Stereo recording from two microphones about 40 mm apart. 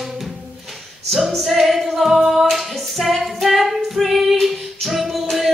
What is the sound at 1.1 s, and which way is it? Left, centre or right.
A capella, centre.